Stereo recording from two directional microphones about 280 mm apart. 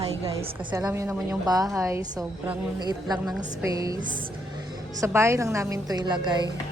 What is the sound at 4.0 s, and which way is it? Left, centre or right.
Speech, right.